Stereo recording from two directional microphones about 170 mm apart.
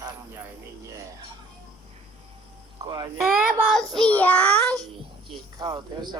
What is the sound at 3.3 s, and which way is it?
Child singing, 10° right (ahead or behind).